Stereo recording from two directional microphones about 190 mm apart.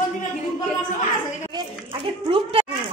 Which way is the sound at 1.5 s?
25° right (ahead or behind).